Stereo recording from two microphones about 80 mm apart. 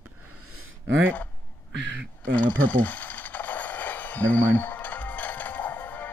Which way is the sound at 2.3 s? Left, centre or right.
Left.